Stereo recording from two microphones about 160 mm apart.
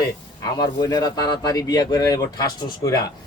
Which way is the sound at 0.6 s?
25° left (ahead or behind).